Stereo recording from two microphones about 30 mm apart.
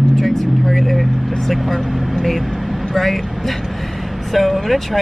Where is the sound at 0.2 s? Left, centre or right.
Centre.